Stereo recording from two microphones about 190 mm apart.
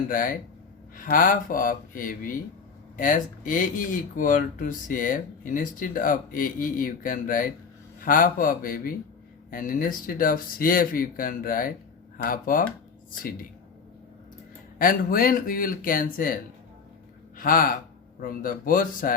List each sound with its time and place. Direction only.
0.1 s speech: 45° left (ahead or behind)
14.8 s speech: 50° left (ahead or behind)